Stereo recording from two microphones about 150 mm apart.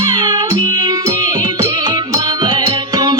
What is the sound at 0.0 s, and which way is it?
Music, 30° right (ahead or behind).